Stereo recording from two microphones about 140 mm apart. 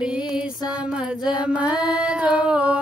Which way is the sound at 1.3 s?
5° right (ahead or behind).